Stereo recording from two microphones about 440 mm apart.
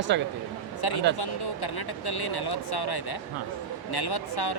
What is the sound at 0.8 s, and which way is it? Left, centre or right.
Speech, left.